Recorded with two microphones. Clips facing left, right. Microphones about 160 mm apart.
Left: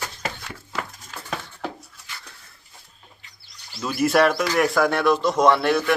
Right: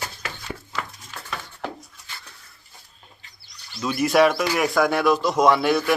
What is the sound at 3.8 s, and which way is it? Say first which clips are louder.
Speech: right 1 dB; centre (ahead or behind).